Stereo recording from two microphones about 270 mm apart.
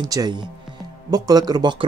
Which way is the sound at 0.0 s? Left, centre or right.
Centre.